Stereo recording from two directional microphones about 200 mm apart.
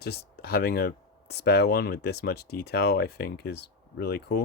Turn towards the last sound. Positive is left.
turn(degrees=55)  # may be behind; listen again after turning